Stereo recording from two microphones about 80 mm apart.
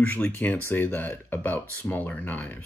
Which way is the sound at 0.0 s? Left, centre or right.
Left.